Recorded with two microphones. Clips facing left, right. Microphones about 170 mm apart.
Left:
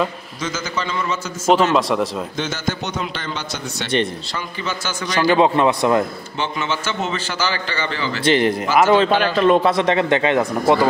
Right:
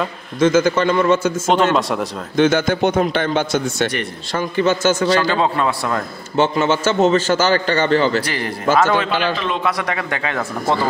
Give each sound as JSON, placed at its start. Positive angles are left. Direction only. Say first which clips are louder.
{"t": 0.4, "sound": "a man's voice", "louder": "right 12 dB", "side_deg": -55}
{"t": 1.5, "sound": "speech", "louder": "left 2 dB", "side_deg": 5}
{"t": 2.3, "sound": "a man's voice", "louder": "right 9 dB", "side_deg": -55}
{"t": 5.0, "sound": "speech", "louder": "even", "side_deg": 15}
{"t": 6.3, "sound": "a man's voice", "louder": "right 9 dB", "side_deg": -45}
{"t": 8.2, "sound": "speech", "louder": "left 7 dB", "side_deg": 20}
{"t": 9.1, "sound": "a man's voice", "louder": "left 5 dB", "side_deg": 45}
{"t": 9.6, "sound": "speech", "louder": "left 5 dB", "side_deg": 25}